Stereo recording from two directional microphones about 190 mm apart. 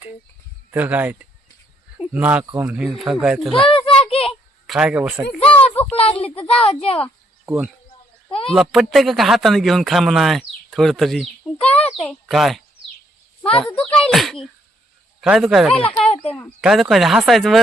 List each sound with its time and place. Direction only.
0.7 s speech: 10° right (ahead or behind)
3.7 s a sound: 30° left (ahead or behind)
4.6 s speech: centre (ahead or behind)
5.4 s a sound: 30° left (ahead or behind)
5.9 s speech: 30° left (ahead or behind)
7.4 s speech: 10° right (ahead or behind)
11.6 s a sound: 5° left (ahead or behind)
14.0 s speech: centre (ahead or behind)
16.0 s speech: 30° left (ahead or behind)
16.6 s speech: centre (ahead or behind)